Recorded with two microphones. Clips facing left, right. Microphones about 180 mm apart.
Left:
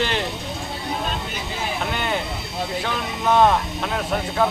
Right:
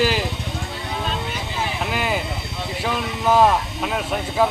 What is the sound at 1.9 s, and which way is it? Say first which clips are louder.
Speech: right 1 dB; 5° right (ahead or behind).